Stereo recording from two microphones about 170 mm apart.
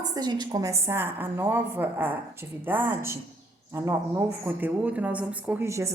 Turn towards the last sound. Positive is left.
turn(degrees=-15)  # may be behind; listen again after turning